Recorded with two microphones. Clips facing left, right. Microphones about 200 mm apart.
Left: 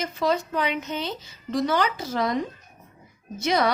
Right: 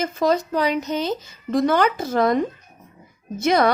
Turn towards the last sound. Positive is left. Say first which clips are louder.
# right 5 dB
turn(degrees=-50)  # may be behind; listen again after turning